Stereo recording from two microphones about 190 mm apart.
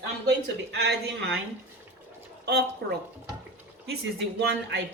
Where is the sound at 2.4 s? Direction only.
60° right (ahead or behind).